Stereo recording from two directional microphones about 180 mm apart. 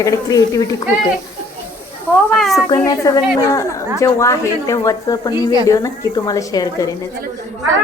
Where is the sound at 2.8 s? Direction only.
20° left (ahead or behind).